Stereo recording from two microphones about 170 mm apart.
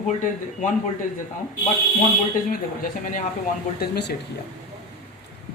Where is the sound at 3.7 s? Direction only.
70° left (ahead or behind).